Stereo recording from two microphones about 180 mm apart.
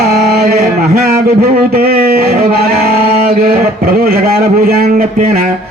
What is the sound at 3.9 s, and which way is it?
Speech, 55° right (ahead or behind).